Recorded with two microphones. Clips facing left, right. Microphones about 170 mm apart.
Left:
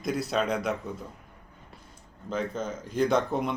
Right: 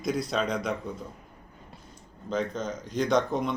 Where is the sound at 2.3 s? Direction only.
5° left (ahead or behind).